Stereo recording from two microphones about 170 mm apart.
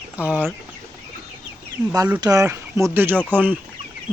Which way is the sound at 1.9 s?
20° right (ahead or behind).